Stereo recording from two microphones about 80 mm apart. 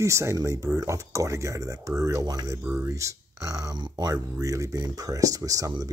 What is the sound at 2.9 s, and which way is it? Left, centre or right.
Speech, right.